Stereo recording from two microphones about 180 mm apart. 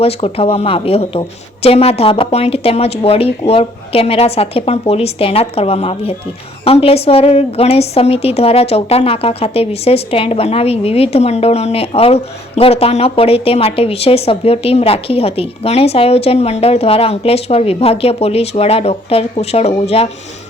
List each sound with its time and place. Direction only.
0.0 s a woman's voice: 35° left (ahead or behind)